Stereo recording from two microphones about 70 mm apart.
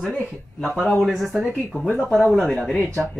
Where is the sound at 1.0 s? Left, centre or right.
Centre.